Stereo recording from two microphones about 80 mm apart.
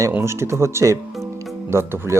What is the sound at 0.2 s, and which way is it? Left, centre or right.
Speech, right.